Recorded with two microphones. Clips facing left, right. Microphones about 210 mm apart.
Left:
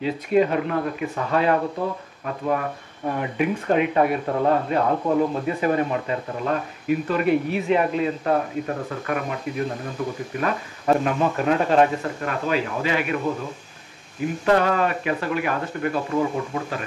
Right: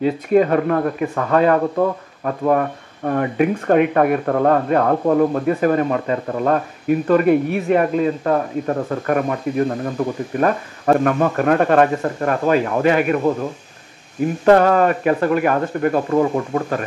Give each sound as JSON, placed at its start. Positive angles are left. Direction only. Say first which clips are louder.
{"t": 0.0, "sound": "speech", "louder": "right 5 dB", "side_deg": -50}
{"t": 14.4, "sound": "speech", "louder": "right 7 dB", "side_deg": -50}